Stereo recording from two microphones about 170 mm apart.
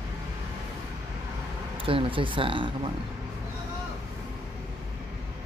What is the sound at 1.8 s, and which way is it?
Speech, 30° right (ahead or behind).